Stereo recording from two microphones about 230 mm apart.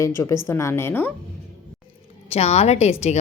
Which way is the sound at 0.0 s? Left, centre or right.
Centre.